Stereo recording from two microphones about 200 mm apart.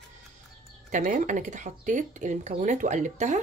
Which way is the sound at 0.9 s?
40° right (ahead or behind).